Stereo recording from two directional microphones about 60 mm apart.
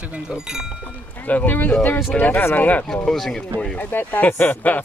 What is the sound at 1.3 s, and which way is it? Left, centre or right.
Speech, left.